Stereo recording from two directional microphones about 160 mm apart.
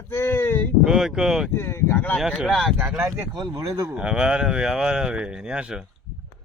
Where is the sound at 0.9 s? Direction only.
5° right (ahead or behind).